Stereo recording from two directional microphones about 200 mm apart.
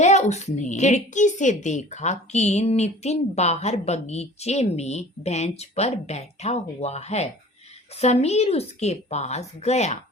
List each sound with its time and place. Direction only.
0.0 s a woman's voice: 35° left (ahead or behind)